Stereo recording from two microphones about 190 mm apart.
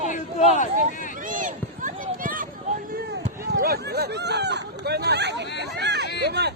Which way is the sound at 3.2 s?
50° right (ahead or behind).